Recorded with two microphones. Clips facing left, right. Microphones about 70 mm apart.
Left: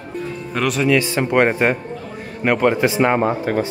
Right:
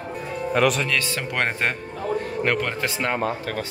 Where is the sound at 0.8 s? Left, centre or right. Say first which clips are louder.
Left 9 dB; centre.